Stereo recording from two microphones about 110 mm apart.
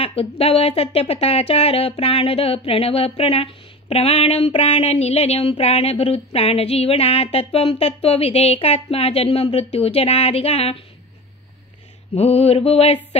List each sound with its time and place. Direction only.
0.0 s speech: 60° left (ahead or behind)
3.9 s mantra: 65° left (ahead or behind)
4.6 s speech: 75° left (ahead or behind)
12.1 s mantra: 70° left (ahead or behind)